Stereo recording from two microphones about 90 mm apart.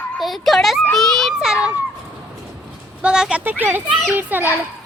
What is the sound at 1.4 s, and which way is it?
Children playing, 10° right (ahead or behind).